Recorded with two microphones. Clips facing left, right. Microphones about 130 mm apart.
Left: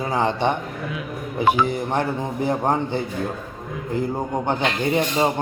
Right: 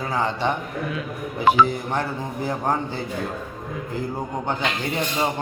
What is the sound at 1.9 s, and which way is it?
Mantra, 20° left (ahead or behind).